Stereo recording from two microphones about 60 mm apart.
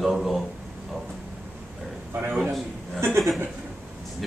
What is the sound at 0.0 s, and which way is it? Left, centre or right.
Speech, centre.